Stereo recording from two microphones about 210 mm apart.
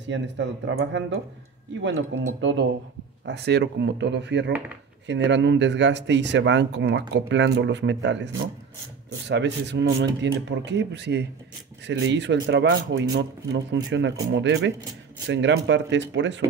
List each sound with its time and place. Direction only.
0.0 s speech: 60° right (ahead or behind)
9.3 s speech: 55° right (ahead or behind)